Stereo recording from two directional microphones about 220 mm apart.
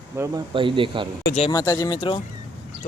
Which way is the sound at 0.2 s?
10° right (ahead or behind).